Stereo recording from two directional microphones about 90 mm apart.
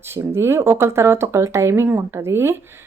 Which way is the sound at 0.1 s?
30° right (ahead or behind).